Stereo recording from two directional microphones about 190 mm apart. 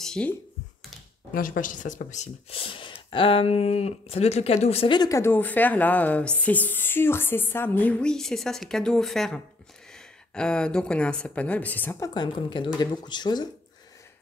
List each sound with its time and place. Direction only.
0.0 s a sound: 5° left (ahead or behind)
1.3 s a woman's voice: 45° left (ahead or behind); by 12.1 s 10° left (ahead or behind)
12.1 s speech: 25° left (ahead or behind)